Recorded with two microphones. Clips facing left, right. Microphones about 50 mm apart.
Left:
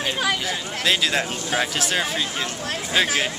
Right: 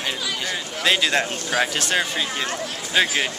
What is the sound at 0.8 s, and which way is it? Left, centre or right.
Speech, centre.